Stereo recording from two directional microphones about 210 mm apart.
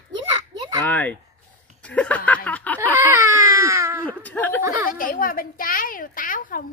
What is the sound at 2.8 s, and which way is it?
Baby cry, 15° right (ahead or behind).